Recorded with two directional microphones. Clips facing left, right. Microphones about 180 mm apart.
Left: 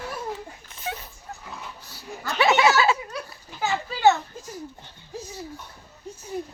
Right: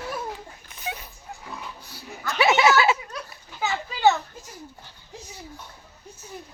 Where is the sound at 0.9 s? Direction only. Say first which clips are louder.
Left 1 dB; 10° right (ahead or behind).